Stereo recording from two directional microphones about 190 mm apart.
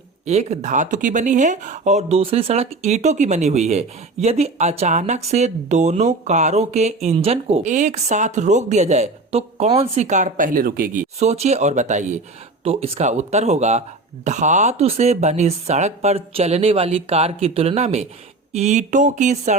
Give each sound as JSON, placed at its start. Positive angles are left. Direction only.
{"t": 0.3, "sound": "speech", "side_deg": -35}